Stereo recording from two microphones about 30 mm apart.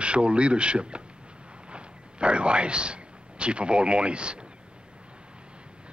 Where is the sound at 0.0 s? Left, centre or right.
Right.